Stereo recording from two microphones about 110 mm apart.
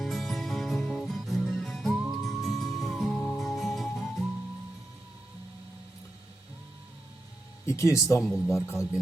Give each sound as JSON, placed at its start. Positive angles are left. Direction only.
{"t": 0.0, "sound": "music", "side_deg": 0}
{"t": 7.7, "sound": "speech", "side_deg": 30}